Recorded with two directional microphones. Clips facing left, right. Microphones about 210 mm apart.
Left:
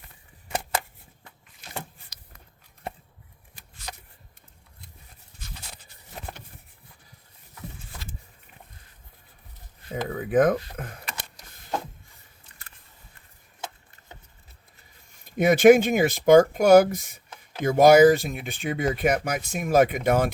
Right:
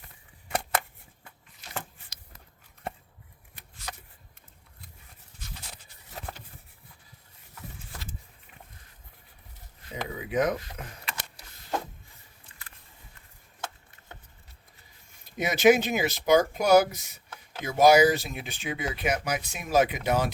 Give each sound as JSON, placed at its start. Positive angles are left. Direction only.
{"t": 1.6, "sound": "a sound", "side_deg": 55}
{"t": 9.9, "sound": "speech", "side_deg": 50}
{"t": 15.4, "sound": "speech", "side_deg": 50}